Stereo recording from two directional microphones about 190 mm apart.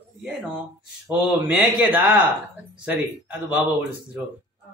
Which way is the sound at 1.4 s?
5° right (ahead or behind).